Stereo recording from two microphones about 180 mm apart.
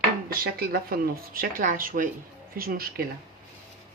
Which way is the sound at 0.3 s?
55° right (ahead or behind).